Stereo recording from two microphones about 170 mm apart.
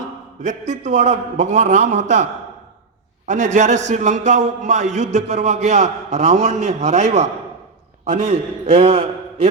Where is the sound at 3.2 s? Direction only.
45° right (ahead or behind).